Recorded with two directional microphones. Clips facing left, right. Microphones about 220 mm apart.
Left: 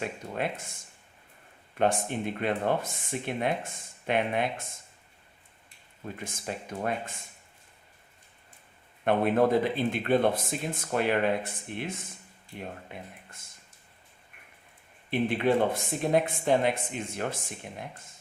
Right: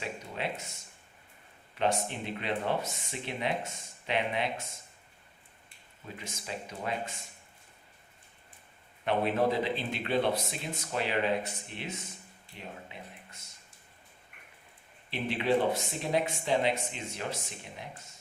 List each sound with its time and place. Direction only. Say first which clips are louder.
0.0 s speech: left 4 dB; 50° left (ahead or behind)
6.1 s speech: left 2 dB; 50° left (ahead or behind)
9.0 s speech: left 4 dB; 50° left (ahead or behind)
15.1 s speech: left 4 dB; 50° left (ahead or behind)